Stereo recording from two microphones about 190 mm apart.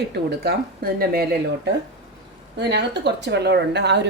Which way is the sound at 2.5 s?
65° right (ahead or behind).